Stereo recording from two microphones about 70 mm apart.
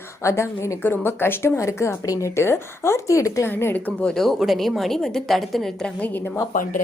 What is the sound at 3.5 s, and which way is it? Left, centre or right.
Speech, left.